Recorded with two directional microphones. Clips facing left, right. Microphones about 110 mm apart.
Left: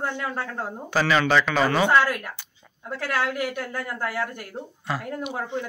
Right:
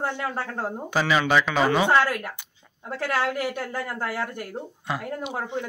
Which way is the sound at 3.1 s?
30° right (ahead or behind).